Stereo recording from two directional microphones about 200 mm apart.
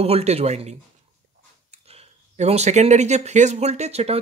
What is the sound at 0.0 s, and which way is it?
Speech, 30° right (ahead or behind).